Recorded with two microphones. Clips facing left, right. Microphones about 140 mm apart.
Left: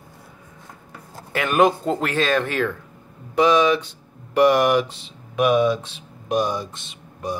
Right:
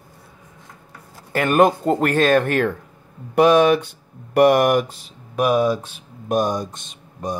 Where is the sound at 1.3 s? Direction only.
50° right (ahead or behind).